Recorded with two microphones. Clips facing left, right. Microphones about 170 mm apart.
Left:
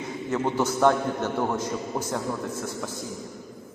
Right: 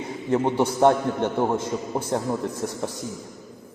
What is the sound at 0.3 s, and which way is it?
A man's voice, 30° right (ahead or behind).